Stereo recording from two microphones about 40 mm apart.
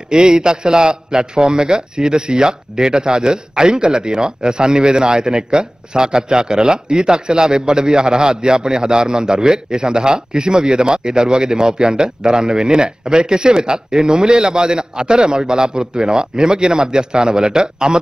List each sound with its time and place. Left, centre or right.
0.1 s a man's voice: right